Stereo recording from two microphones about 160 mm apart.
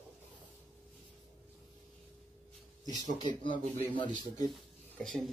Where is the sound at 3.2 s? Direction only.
30° left (ahead or behind).